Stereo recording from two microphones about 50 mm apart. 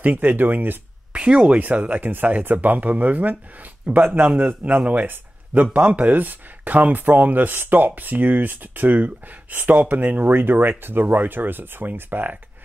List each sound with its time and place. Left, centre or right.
0.0 s speech: right
1.1 s speech: right